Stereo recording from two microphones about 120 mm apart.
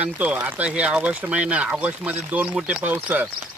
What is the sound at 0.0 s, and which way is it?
Speech, 10° right (ahead or behind).